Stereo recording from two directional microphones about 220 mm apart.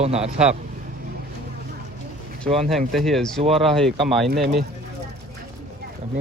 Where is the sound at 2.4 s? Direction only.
25° right (ahead or behind).